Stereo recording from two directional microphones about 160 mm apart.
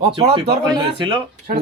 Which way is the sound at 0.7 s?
30° right (ahead or behind).